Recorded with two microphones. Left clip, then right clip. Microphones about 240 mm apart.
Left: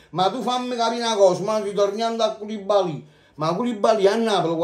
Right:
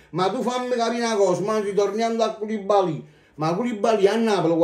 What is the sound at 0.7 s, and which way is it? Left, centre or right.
Speech, left.